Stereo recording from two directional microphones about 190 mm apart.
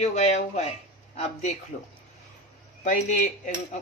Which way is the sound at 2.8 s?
40° left (ahead or behind).